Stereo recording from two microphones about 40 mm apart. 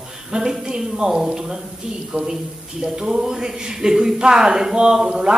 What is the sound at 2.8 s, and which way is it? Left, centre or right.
Speech, centre.